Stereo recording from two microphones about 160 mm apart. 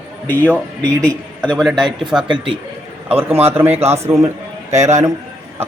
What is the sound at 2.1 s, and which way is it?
Speech, 30° right (ahead or behind).